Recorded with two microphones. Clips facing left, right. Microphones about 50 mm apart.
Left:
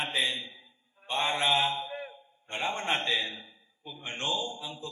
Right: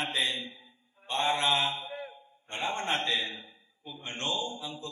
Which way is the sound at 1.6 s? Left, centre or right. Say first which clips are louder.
Left 2 dB; left.